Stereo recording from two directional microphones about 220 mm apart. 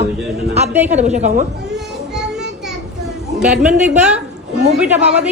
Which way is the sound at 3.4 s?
5° right (ahead or behind).